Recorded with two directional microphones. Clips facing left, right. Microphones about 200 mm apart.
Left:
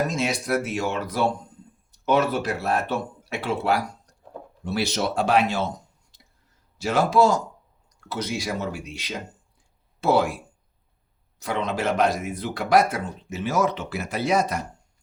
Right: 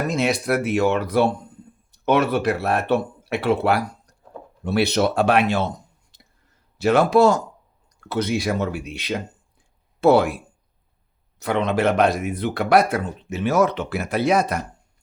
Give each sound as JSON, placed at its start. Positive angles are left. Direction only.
{"t": 0.1, "sound": "speech", "side_deg": -60}
{"t": 11.3, "sound": "speech", "side_deg": -60}